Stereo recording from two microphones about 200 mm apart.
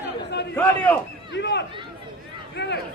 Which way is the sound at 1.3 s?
60° left (ahead or behind).